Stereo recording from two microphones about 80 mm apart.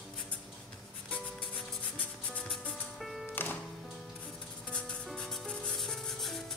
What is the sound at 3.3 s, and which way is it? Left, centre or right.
Music, left.